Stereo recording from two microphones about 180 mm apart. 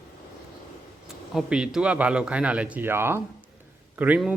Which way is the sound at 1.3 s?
5° right (ahead or behind).